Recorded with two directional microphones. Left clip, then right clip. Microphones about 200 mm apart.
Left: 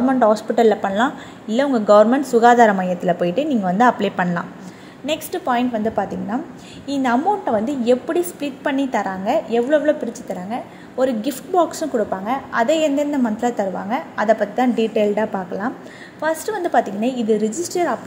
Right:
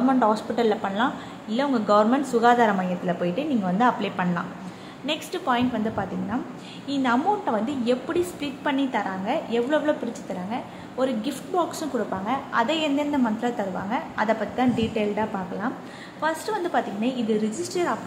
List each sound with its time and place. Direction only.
0.1 s speech: 25° left (ahead or behind)